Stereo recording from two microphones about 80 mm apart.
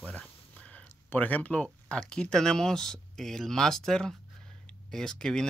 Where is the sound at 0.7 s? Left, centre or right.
Centre.